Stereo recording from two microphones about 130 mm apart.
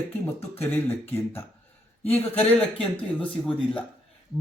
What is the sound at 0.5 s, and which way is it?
Speech, 15° left (ahead or behind).